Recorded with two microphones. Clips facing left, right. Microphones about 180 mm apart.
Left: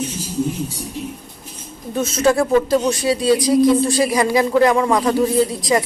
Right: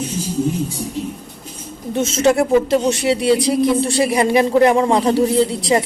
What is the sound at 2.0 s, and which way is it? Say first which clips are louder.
Speech: right 1 dB; 25° right (ahead or behind).